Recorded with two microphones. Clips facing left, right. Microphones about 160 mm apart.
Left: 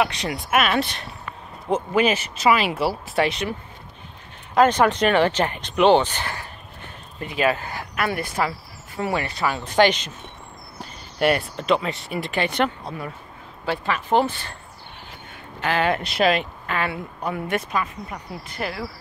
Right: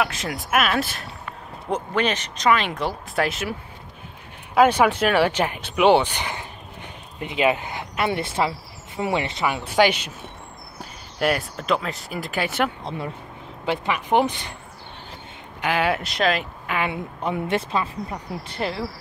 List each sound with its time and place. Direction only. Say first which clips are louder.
0.0 s speech: left 2 dB; centre (ahead or behind)
4.6 s speech: even; 10° right (ahead or behind)
9.7 s speech: left 1 dB; 10° right (ahead or behind)
11.1 s speech: left 2 dB; centre (ahead or behind)
12.8 s speech: right 2 dB; 25° right (ahead or behind)
15.6 s speech: even; 10° right (ahead or behind)
16.6 s speech: even; 15° right (ahead or behind)